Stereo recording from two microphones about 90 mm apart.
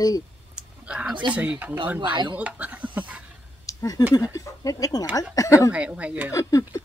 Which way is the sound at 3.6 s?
40° left (ahead or behind).